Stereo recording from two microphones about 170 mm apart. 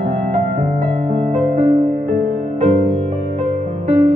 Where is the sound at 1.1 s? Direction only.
35° right (ahead or behind).